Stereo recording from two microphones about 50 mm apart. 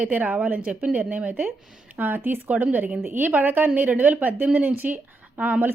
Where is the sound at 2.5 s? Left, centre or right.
Right.